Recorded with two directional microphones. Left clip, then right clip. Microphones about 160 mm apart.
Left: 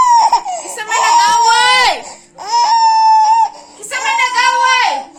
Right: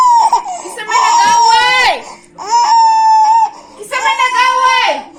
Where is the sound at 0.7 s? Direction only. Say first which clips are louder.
Right 1 dB; 40° left (ahead or behind).